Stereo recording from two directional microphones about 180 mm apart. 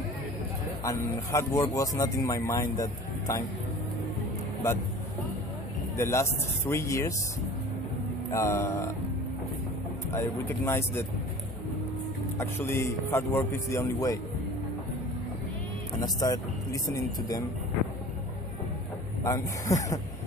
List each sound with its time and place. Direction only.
0.8 s speech: 20° left (ahead or behind)
5.9 s speech: 15° left (ahead or behind)
8.3 s speech: 15° left (ahead or behind)
10.1 s speech: 15° left (ahead or behind)
12.4 s speech: 10° left (ahead or behind)
16.0 s speech: 20° left (ahead or behind)
19.2 s speech: 20° left (ahead or behind)